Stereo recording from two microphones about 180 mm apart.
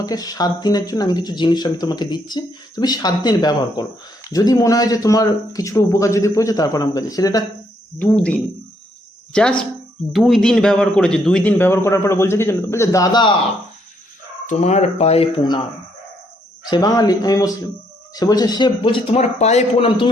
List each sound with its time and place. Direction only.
0.0 s speech: 20° left (ahead or behind)
7.9 s a man's voice: 5° left (ahead or behind)
14.4 s speech: 40° left (ahead or behind)
16.6 s speech: 20° left (ahead or behind)